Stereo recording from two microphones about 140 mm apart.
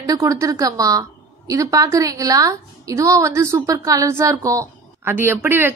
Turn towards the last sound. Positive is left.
turn(degrees=-15)  # may be behind; listen again after turning